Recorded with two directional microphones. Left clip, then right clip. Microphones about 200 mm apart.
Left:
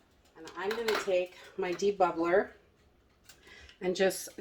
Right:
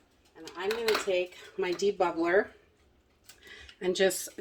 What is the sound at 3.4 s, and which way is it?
Speech, centre (ahead or behind).